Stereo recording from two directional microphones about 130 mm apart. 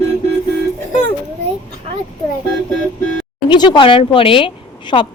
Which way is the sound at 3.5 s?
35° left (ahead or behind).